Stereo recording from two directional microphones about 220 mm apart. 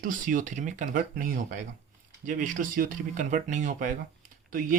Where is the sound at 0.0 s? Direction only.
35° right (ahead or behind).